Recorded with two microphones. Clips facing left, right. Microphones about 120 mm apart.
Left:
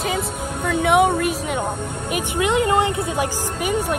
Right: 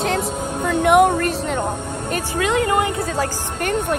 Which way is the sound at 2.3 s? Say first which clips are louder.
Left 1 dB; 20° left (ahead or behind).